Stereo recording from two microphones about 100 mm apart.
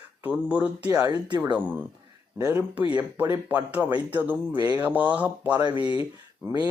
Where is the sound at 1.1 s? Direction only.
45° right (ahead or behind).